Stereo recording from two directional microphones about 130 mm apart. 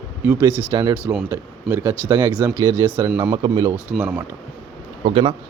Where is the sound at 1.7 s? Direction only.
20° right (ahead or behind).